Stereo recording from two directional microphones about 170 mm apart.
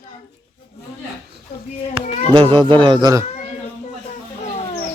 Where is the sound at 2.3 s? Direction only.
30° right (ahead or behind).